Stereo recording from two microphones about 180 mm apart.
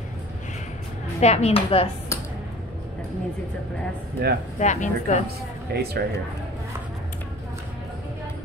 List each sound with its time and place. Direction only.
1.2 s speech: 35° left (ahead or behind)
4.2 s speech: 60° right (ahead or behind)
4.6 s speech: 40° left (ahead or behind)
5.7 s speech: 60° right (ahead or behind)